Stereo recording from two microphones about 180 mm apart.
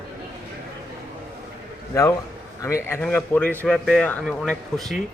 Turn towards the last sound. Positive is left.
turn(degrees=0)  # may be behind; listen again after turning